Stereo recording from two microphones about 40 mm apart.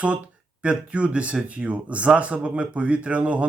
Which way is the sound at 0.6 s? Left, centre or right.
Right.